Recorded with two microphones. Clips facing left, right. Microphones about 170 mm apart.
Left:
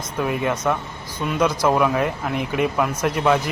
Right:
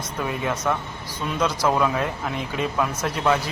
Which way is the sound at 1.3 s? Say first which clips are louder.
Left 3 dB; 10° left (ahead or behind).